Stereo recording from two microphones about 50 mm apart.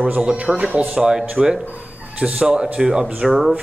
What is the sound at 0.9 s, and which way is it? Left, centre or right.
Speech, centre.